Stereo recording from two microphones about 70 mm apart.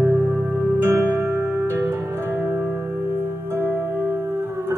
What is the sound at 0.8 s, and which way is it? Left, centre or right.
Music, right.